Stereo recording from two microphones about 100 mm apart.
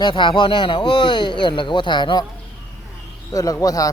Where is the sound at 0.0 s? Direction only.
55° left (ahead or behind).